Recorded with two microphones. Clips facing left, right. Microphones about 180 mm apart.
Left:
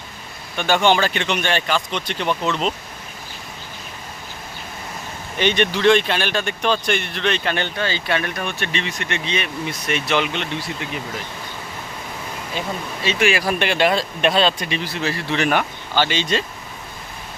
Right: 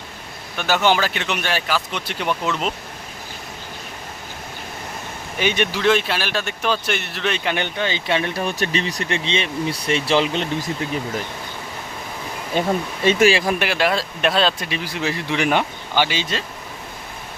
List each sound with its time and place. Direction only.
0.5 s speech: 5° right (ahead or behind)
5.4 s speech: 10° right (ahead or behind); by 11.0 s 40° right (ahead or behind)
12.5 s speech: 50° right (ahead or behind)
13.6 s speech: 5° right (ahead or behind)
14.8 s speech: 15° right (ahead or behind)